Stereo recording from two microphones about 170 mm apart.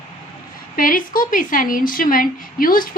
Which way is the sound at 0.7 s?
55° left (ahead or behind).